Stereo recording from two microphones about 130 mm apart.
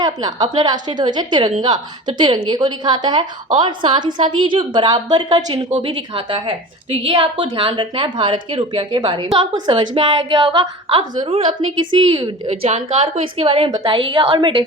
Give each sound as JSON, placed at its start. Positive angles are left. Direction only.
{"t": 0.0, "sound": "a woman's voice", "side_deg": -30}